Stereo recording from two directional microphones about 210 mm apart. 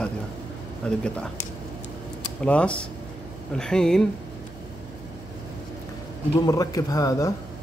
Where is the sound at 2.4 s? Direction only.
5° left (ahead or behind).